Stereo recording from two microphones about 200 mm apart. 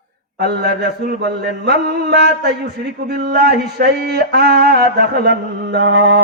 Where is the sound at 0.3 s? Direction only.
55° right (ahead or behind).